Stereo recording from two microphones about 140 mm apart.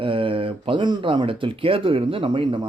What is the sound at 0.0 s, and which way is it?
Speech, 40° right (ahead or behind).